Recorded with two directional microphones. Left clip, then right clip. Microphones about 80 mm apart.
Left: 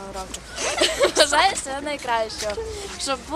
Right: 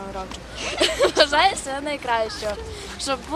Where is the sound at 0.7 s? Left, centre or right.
Centre.